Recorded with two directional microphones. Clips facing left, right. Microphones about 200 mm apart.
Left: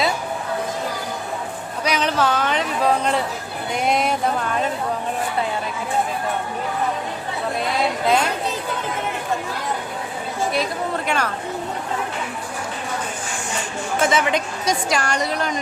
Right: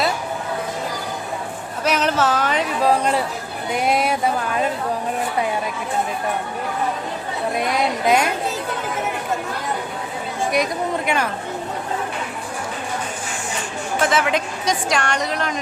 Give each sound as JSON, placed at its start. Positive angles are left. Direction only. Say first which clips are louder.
{"t": 1.8, "sound": "a woman's voice", "louder": "right 1 dB", "side_deg": -5}
{"t": 7.6, "sound": "a woman's voice", "louder": "right 1 dB", "side_deg": -15}
{"t": 10.5, "sound": "a woman's voice", "louder": "right 5 dB", "side_deg": -15}
{"t": 14.0, "sound": "a woman's voice", "louder": "even", "side_deg": 0}